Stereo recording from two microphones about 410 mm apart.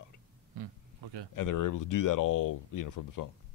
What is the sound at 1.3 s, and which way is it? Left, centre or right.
Speech, left.